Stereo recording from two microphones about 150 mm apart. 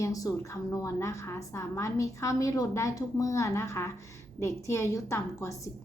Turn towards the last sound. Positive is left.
turn(degrees=20)  # may be behind; listen again after turning